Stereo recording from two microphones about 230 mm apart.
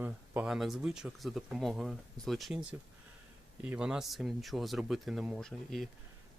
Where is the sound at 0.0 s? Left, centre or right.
Centre.